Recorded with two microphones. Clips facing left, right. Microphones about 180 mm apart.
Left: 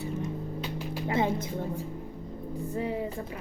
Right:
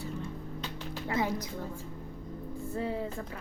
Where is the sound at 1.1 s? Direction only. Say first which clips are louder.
Left 4 dB; 25° left (ahead or behind).